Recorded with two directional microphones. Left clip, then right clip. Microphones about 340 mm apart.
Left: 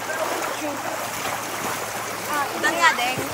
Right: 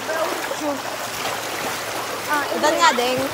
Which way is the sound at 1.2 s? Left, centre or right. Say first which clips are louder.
Right 2 dB; centre.